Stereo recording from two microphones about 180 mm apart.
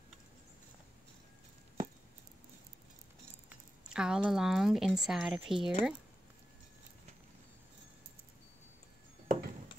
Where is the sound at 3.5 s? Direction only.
5° right (ahead or behind).